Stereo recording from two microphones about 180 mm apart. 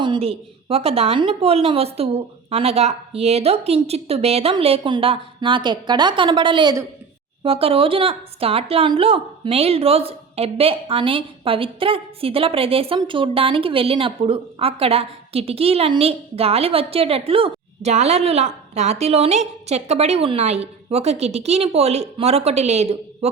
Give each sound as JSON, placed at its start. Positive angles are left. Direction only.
{"t": 0.0, "sound": "speech", "side_deg": -30}